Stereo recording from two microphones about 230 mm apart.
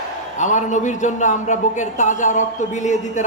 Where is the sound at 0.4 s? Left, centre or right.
Left.